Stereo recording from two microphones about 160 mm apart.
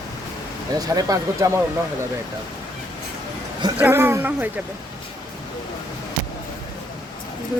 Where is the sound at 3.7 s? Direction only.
10° right (ahead or behind).